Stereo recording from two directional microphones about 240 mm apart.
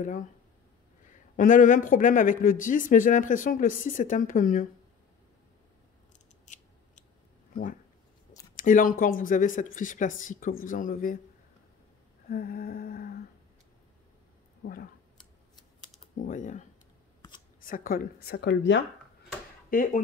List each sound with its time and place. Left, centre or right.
0.0 s speech: left
6.4 s scissors: left
8.6 s speech: left
12.3 s humming: left
14.6 s speech: left
16.2 s speech: left
19.7 s speech: left